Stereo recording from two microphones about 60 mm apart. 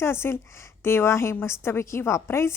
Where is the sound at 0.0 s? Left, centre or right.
Left.